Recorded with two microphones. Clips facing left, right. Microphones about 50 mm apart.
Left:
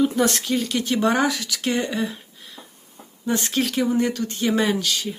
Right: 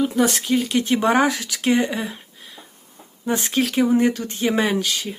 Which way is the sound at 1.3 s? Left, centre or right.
Right.